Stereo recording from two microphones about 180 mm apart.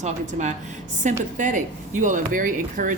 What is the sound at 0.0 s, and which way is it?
Speech, 40° right (ahead or behind).